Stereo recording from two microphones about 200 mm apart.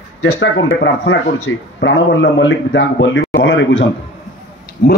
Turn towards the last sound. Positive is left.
turn(degrees=55)  # may be behind; listen again after turning